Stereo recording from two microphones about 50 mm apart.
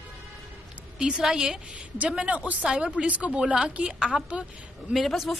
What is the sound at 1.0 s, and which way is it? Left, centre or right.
Speech, centre.